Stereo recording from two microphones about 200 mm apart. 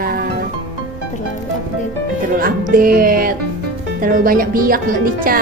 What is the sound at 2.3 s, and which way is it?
Speech, 45° right (ahead or behind).